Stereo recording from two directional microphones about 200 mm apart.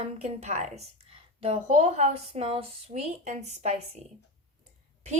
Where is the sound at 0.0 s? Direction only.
35° right (ahead or behind).